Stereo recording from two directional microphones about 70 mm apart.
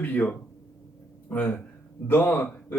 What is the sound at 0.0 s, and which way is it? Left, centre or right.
Speech, left.